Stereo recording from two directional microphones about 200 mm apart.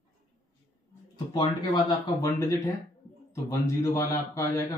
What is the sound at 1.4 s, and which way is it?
Speech, 20° left (ahead or behind).